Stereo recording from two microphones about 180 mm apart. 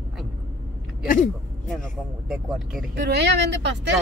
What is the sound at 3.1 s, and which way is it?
Speech, 70° right (ahead or behind).